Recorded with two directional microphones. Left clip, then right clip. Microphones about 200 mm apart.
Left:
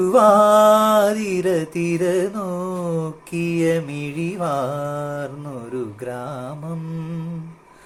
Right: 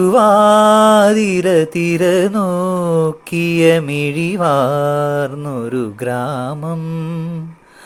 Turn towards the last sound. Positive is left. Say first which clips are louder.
# right 7 dB
turn(degrees=-40)  # may be behind; listen again after turning